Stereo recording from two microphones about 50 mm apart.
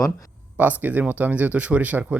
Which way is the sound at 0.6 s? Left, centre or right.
Right.